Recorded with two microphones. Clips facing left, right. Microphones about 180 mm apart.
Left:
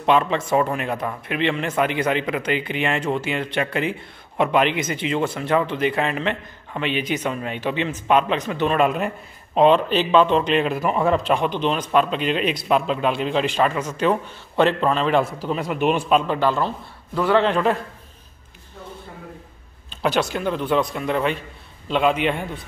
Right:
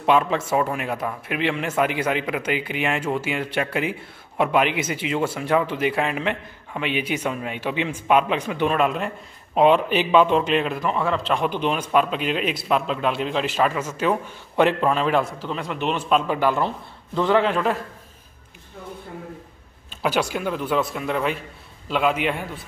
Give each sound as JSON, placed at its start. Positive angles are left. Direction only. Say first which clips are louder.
{"t": 0.0, "sound": "a man's voice", "louder": "left 1 dB", "side_deg": -5}
{"t": 9.6, "sound": "a man's voice", "louder": "left 1 dB", "side_deg": -10}
{"t": 11.3, "sound": "speech", "louder": "left 1 dB", "side_deg": -5}
{"t": 15.3, "sound": "a man's voice", "louder": "left 4 dB", "side_deg": 10}
{"t": 16.2, "sound": "a man's voice", "louder": "left 1 dB", "side_deg": -10}
{"t": 19.9, "sound": "a man's voice", "louder": "left 1 dB", "side_deg": -10}